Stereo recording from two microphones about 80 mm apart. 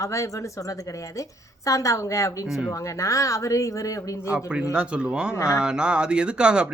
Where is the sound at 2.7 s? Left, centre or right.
Left.